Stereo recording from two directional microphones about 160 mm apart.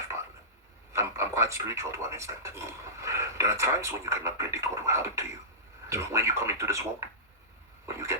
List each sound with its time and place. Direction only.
0.9 s speech: 15° right (ahead or behind)